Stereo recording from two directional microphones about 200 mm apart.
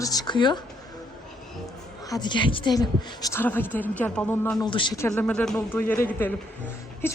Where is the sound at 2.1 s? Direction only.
20° left (ahead or behind).